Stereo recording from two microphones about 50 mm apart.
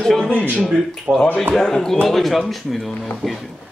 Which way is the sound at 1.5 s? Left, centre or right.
Centre.